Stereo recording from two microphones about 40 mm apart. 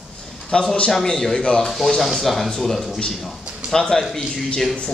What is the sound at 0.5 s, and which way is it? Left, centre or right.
Speech, left.